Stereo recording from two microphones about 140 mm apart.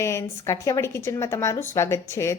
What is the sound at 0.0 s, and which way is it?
Speech, 20° left (ahead or behind).